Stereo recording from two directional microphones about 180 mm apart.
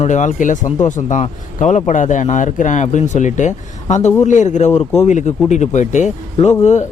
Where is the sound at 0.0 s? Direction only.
45° left (ahead or behind).